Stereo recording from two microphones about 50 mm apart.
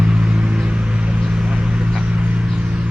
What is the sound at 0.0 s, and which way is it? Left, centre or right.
Vehicle, right.